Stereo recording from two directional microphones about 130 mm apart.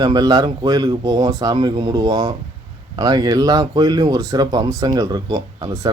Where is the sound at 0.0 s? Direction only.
30° right (ahead or behind).